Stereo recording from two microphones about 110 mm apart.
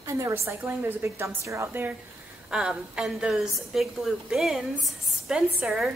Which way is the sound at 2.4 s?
10° right (ahead or behind).